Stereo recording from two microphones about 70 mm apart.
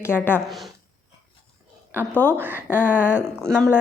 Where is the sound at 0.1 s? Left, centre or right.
Left.